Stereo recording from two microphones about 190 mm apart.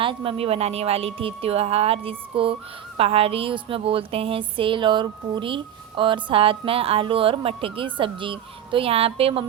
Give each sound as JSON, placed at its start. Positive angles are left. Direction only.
{"t": 0.0, "sound": "a woman's voice", "side_deg": -25}